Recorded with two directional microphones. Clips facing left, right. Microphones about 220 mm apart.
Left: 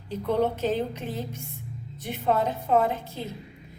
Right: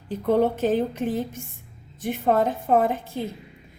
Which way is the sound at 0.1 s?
50° right (ahead or behind).